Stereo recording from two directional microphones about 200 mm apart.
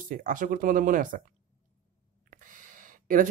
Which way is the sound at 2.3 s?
40° right (ahead or behind).